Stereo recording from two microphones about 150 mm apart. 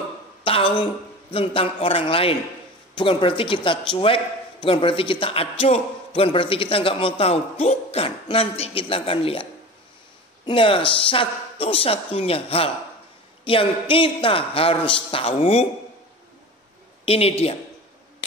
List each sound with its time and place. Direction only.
0.4 s a sound: 35° left (ahead or behind)
1.3 s a man's voice: 40° left (ahead or behind)
17.0 s a man's voice: 40° left (ahead or behind)